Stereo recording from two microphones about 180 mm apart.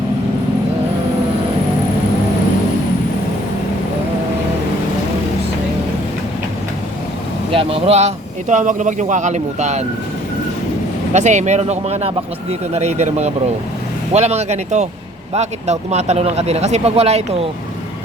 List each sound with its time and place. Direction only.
7.5 s speech: 30° right (ahead or behind)
11.1 s speech: 40° right (ahead or behind)